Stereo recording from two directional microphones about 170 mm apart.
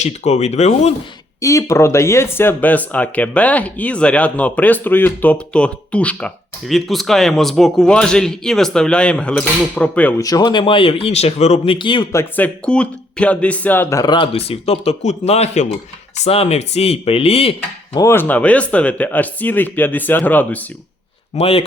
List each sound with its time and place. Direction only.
0.0 s speech: 40° left (ahead or behind)
1.4 s speech: 20° left (ahead or behind)
10.2 s speech: 20° left (ahead or behind)
12.1 s speech: 10° left (ahead or behind); by 17.5 s 35° left (ahead or behind)
17.9 s speech: 15° left (ahead or behind)
21.3 s speech: 35° left (ahead or behind)